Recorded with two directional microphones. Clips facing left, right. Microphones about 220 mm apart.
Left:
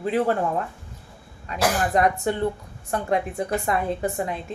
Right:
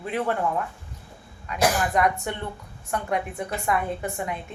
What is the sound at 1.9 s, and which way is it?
A woman's voice, 30° left (ahead or behind).